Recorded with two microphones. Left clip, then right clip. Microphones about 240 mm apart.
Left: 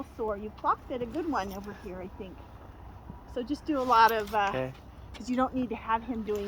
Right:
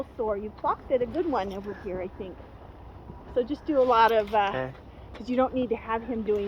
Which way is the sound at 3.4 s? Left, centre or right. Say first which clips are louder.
Right 1 dB; left.